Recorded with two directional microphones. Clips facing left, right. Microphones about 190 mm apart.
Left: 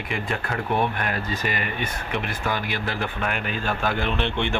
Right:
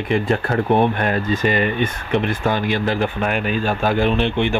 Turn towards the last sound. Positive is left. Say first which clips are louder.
# right 7 dB
turn(degrees=-15)  # may be behind; listen again after turning